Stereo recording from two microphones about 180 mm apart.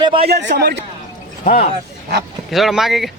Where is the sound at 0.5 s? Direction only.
60° right (ahead or behind).